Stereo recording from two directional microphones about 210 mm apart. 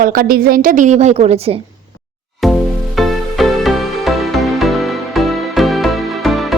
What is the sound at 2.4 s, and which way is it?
Music, centre (ahead or behind).